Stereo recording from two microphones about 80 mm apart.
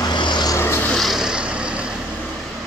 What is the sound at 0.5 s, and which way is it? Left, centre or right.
Vehicle, left.